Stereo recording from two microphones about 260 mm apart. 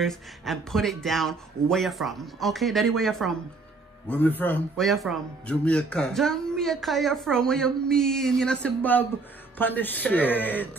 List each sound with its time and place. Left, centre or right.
0.0 s speech: centre